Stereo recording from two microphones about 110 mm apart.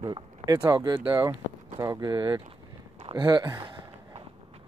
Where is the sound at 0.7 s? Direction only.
35° right (ahead or behind).